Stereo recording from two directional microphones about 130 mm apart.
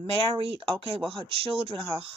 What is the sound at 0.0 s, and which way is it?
Speech, 45° right (ahead or behind).